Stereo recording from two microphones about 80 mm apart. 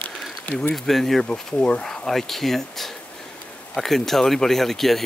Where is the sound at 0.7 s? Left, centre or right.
Centre.